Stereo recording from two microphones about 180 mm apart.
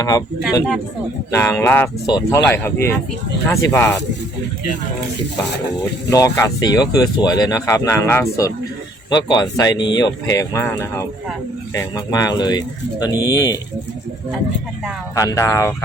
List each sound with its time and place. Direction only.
1.3 s speech: 15° left (ahead or behind)
6.1 s speech: 15° left (ahead or behind)
15.1 s speech: 20° left (ahead or behind)